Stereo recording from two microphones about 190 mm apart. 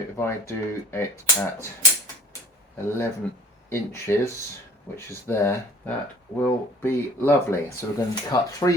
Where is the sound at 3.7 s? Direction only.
15° left (ahead or behind).